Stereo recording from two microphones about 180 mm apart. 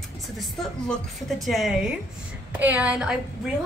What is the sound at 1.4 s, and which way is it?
A woman's voice, centre (ahead or behind).